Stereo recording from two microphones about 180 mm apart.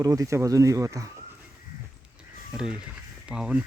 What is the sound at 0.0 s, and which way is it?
Speech, 20° right (ahead or behind).